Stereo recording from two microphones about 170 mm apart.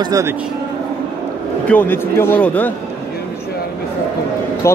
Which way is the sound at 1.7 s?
10° left (ahead or behind).